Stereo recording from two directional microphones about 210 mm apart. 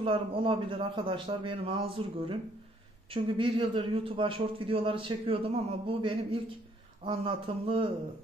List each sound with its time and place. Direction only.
0.0 s a man's voice: 25° right (ahead or behind)